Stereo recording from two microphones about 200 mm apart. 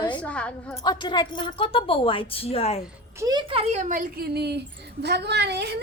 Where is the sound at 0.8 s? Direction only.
20° left (ahead or behind).